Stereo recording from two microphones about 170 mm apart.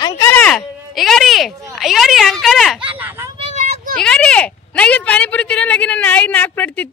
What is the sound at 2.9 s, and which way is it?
Speech, 10° right (ahead or behind).